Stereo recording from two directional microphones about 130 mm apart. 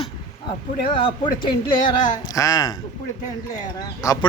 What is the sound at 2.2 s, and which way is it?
Speech, 30° left (ahead or behind).